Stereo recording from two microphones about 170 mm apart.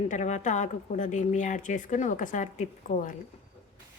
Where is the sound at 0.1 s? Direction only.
45° left (ahead or behind).